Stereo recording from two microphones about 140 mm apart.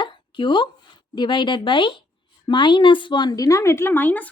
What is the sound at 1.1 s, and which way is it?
Speech, 35° left (ahead or behind).